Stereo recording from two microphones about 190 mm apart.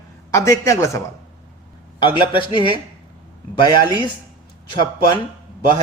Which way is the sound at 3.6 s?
20° left (ahead or behind).